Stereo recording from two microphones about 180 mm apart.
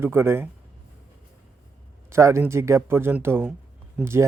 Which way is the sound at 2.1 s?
15° right (ahead or behind).